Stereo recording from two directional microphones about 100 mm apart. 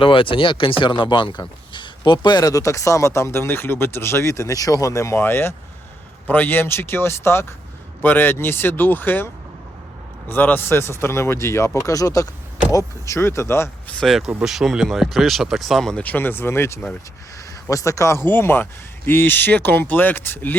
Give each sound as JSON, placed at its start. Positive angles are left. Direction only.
{"t": 0.0, "sound": "speech", "side_deg": 60}
{"t": 14.0, "sound": "speech", "side_deg": 0}
{"t": 16.0, "sound": "speech", "side_deg": 20}
{"t": 18.3, "sound": "speech", "side_deg": 20}